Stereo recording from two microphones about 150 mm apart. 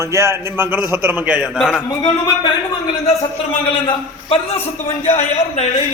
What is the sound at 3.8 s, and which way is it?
A man's voice, 40° left (ahead or behind).